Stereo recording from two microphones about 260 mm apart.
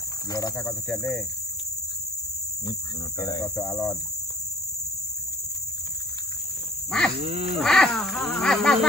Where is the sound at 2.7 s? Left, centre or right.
Centre.